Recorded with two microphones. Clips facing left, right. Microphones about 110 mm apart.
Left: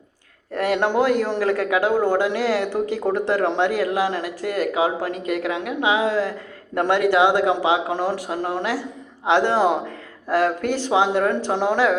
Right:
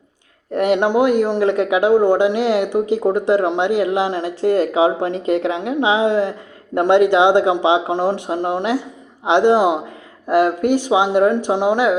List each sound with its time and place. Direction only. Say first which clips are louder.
0.5 s a man's voice: right 4 dB; 20° right (ahead or behind)